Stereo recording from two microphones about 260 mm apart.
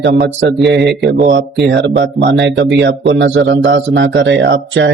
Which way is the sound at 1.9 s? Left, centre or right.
Right.